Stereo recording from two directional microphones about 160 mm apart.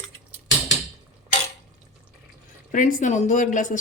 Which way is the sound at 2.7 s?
50° left (ahead or behind).